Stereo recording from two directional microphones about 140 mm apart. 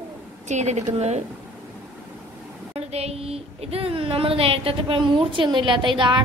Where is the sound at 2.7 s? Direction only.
45° right (ahead or behind).